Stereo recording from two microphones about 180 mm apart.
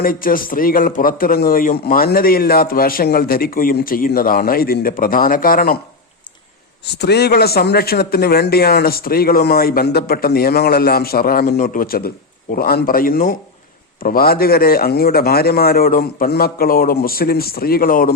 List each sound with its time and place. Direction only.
0.0 s a man's voice: 55° left (ahead or behind)
6.9 s speech: 65° left (ahead or behind)